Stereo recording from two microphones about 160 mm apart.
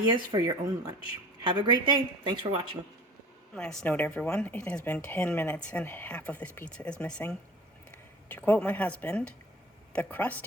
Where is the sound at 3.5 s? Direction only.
5° left (ahead or behind).